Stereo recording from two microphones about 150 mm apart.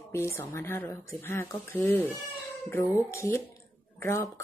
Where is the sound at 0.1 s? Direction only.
15° left (ahead or behind).